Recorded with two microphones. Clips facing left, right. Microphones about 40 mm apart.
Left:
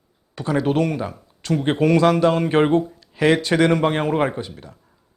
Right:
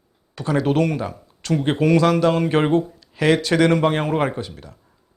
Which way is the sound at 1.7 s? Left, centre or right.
Left.